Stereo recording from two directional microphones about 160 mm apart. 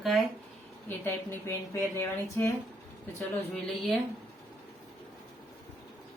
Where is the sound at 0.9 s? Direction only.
15° left (ahead or behind).